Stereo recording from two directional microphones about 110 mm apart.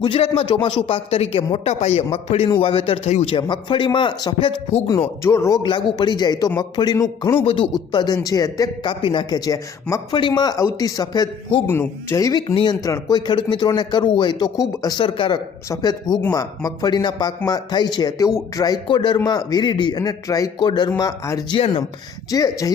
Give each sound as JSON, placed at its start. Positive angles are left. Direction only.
{"t": 0.1, "sound": "speech", "side_deg": 65}
{"t": 1.5, "sound": "speech", "side_deg": 75}
{"t": 2.0, "sound": "speech", "side_deg": 65}
{"t": 3.3, "sound": "a man's voice", "side_deg": 50}
{"t": 5.2, "sound": "speech", "side_deg": 25}
{"t": 5.6, "sound": "a man's voice", "side_deg": 45}
{"t": 7.4, "sound": "a man's voice", "side_deg": 45}
{"t": 8.9, "sound": "a man's voice", "side_deg": 50}
{"t": 11.6, "sound": "a man's voice", "side_deg": 20}
{"t": 14.9, "sound": "a man's voice", "side_deg": 50}
{"t": 15.7, "sound": "a man's voice", "side_deg": 35}
{"t": 20.6, "sound": "a man's voice", "side_deg": 45}
{"t": 21.5, "sound": "a man's voice", "side_deg": 50}
{"t": 22.3, "sound": "a man's voice", "side_deg": 35}